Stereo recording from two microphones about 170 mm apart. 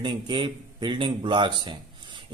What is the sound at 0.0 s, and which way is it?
A man's voice, 30° right (ahead or behind).